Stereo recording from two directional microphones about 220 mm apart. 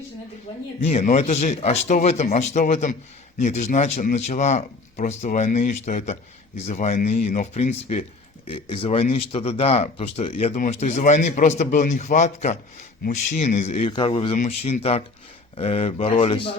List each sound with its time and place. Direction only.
0.9 s speech: 30° left (ahead or behind)